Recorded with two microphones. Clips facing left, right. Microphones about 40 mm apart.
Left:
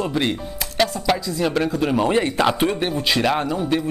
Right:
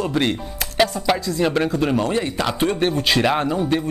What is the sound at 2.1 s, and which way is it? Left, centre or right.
Speech, centre.